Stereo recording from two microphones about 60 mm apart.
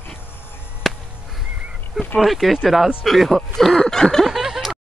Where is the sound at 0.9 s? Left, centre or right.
Centre.